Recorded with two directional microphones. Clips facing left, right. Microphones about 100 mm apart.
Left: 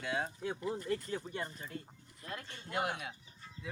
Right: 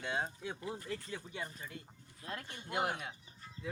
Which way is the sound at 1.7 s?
40° left (ahead or behind).